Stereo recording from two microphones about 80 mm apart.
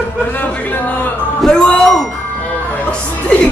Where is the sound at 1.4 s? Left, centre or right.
Centre.